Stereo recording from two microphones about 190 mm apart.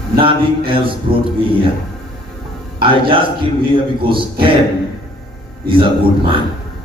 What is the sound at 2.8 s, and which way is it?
Speech, 25° right (ahead or behind).